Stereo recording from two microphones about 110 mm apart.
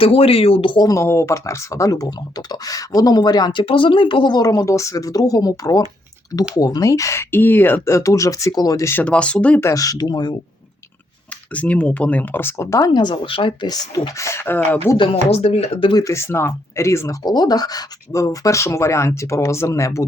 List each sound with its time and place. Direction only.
0.0 s speech: 60° left (ahead or behind)
0.9 s speech: 25° left (ahead or behind)
9.0 s speech: 10° left (ahead or behind)
9.6 s speech: 25° left (ahead or behind)
11.5 s speech: 15° left (ahead or behind)
12.9 s speech: 45° left (ahead or behind)
14.2 s speech: 25° left (ahead or behind)
15.1 s speech: 60° left (ahead or behind)
15.9 s speech: 30° left (ahead or behind)
17.2 s speech: 40° left (ahead or behind)